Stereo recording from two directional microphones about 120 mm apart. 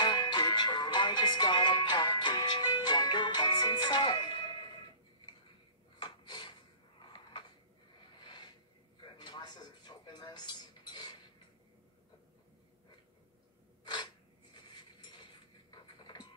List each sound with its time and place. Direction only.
0.0 s music: 40° left (ahead or behind)
5.9 s a sound: 40° left (ahead or behind)
8.2 s snort: 40° left (ahead or behind)
9.0 s television: 40° left (ahead or behind)
13.8 s filing: 40° left (ahead or behind)
15.7 s a sound: 40° left (ahead or behind)